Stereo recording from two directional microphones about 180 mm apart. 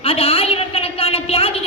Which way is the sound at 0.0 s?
30° left (ahead or behind).